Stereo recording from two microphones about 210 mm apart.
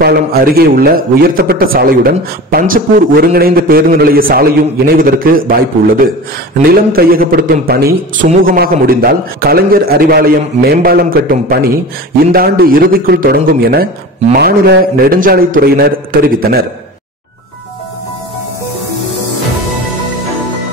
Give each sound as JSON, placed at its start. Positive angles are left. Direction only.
{"t": 0.0, "sound": "a man's voice", "side_deg": -45}
{"t": 6.6, "sound": "a man's voice", "side_deg": -45}